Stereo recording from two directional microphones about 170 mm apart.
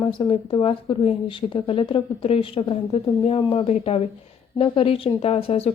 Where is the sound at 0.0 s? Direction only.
30° left (ahead or behind).